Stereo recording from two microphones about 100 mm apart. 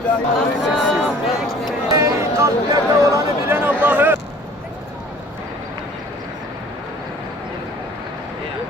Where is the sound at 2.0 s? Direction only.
35° right (ahead or behind).